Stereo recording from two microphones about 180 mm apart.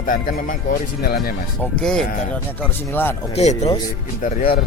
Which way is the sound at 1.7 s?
5° left (ahead or behind).